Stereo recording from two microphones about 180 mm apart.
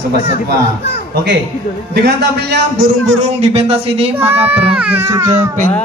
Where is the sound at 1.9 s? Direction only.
65° right (ahead or behind).